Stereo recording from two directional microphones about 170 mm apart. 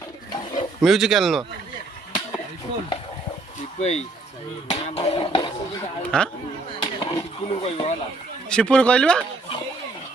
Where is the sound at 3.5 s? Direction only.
40° left (ahead or behind).